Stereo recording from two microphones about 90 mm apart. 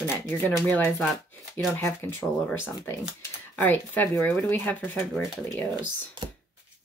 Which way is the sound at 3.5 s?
20° left (ahead or behind).